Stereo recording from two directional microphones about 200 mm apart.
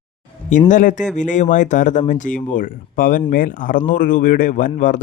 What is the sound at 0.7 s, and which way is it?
Speech, 40° left (ahead or behind).